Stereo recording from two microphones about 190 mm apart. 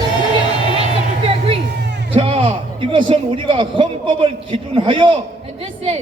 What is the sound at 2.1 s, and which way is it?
Music, 30° right (ahead or behind).